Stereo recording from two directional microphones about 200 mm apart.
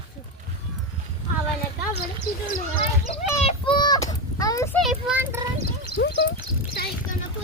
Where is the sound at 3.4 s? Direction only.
25° left (ahead or behind).